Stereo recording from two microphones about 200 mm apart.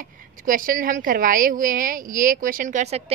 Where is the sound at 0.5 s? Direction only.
45° right (ahead or behind).